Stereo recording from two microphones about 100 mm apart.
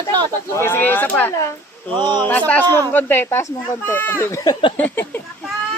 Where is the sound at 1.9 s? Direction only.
50° right (ahead or behind).